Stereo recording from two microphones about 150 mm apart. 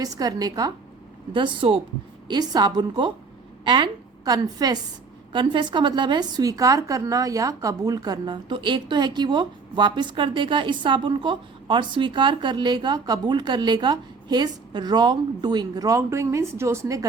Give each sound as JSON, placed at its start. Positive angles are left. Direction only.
{"t": 0.0, "sound": "a woman's voice", "side_deg": -25}